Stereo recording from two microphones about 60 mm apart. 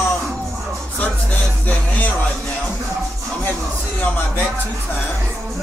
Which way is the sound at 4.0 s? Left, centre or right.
Left.